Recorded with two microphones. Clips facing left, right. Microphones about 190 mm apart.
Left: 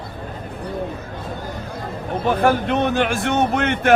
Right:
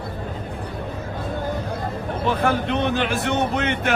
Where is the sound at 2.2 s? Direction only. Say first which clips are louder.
Left 4 dB; 50° left (ahead or behind).